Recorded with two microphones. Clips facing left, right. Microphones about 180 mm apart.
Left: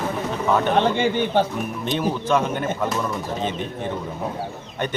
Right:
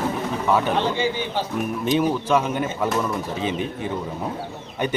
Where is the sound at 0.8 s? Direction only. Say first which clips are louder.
Left 3 dB; 60° left (ahead or behind).